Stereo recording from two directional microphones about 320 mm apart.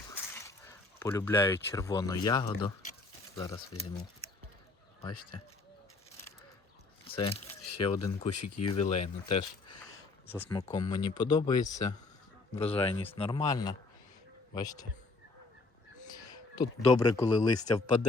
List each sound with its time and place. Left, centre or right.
0.1 s speech: centre
7.1 s speech: centre
7.7 s speech: left
8.6 s speech: centre
16.0 s speech: centre